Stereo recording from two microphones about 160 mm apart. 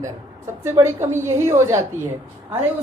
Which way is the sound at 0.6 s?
15° right (ahead or behind).